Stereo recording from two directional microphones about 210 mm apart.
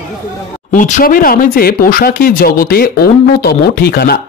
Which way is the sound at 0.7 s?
40° left (ahead or behind).